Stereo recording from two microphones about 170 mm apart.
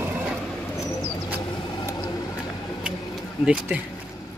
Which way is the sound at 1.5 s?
25° left (ahead or behind).